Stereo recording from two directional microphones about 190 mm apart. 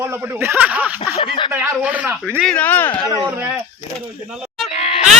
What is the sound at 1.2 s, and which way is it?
Speech, 25° left (ahead or behind).